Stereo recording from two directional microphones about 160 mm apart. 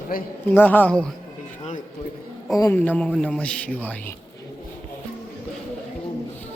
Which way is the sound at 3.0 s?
5° left (ahead or behind).